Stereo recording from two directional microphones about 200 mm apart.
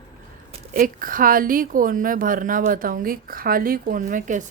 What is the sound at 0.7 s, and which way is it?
Speech, 45° right (ahead or behind).